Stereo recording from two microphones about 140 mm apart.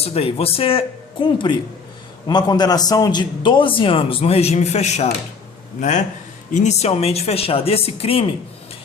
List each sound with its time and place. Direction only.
0.0 s a man's voice: 45° left (ahead or behind)
6.5 s speech: 55° left (ahead or behind)